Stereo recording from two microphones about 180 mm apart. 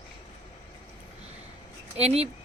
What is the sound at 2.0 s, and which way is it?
Speech, 35° right (ahead or behind).